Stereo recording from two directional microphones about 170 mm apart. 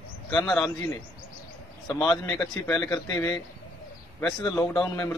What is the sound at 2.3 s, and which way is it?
Speech, 5° left (ahead or behind).